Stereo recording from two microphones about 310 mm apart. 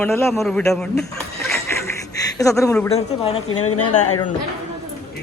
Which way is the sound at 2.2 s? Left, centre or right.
Centre.